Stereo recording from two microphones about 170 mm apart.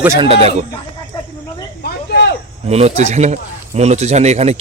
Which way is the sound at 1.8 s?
80° left.